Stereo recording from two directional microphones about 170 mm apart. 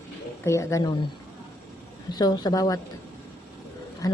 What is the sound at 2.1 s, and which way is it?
Speech, 25° left (ahead or behind).